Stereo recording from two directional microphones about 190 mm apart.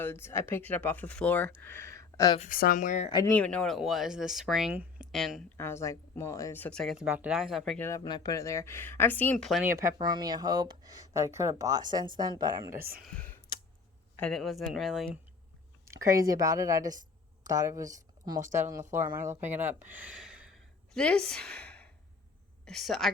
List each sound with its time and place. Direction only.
0.0 s speech: 10° left (ahead or behind)
2.4 s speech: 45° left (ahead or behind)
3.2 s a woman's voice: 5° left (ahead or behind)
5.5 s speech: 15° left (ahead or behind)
7.9 s speech: 20° left (ahead or behind); by 9.6 s centre (ahead or behind)
9.6 s speech: 15° right (ahead or behind)
13.0 s a woman's voice: 5° left (ahead or behind)
15.9 s a woman's voice: 15° right (ahead or behind)
18.3 s speech: 40° right (ahead or behind)
18.6 s a woman's voice: 15° right (ahead or behind)